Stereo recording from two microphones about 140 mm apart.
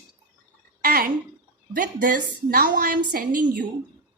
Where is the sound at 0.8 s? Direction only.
90° right.